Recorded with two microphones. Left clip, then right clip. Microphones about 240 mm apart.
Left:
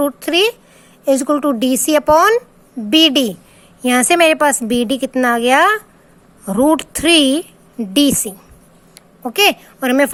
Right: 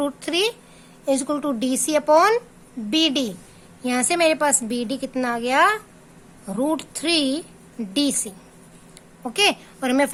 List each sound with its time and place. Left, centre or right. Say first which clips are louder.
0.0 s a woman's voice: left 8 dB; centre